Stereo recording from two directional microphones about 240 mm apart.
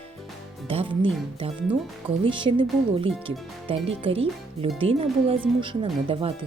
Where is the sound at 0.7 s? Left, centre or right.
Right.